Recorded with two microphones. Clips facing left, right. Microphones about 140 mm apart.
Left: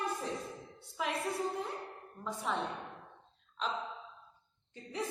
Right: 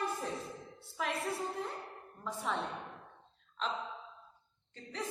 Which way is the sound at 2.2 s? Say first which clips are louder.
Even; centre (ahead or behind).